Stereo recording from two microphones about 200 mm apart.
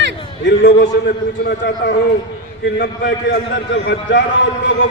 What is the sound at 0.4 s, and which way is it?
A man's voice, 60° left (ahead or behind).